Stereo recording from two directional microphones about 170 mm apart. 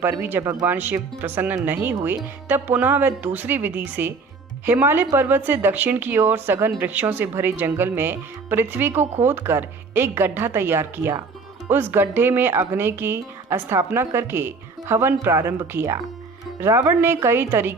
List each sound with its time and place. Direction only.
0.0 s speech: 10° right (ahead or behind)